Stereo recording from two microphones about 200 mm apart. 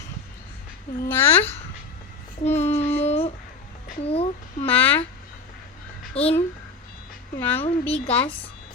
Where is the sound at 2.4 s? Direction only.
35° left (ahead or behind).